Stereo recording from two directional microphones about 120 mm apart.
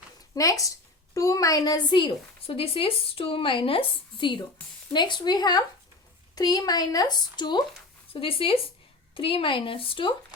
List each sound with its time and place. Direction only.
0.3 s a woman's voice: 30° left (ahead or behind)
8.1 s a woman's voice: 50° left (ahead or behind)